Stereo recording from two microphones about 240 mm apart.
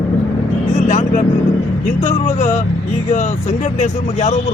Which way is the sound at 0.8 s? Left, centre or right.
Left.